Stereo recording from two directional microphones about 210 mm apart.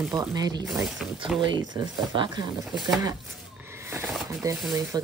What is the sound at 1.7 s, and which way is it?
Speech, 20° right (ahead or behind).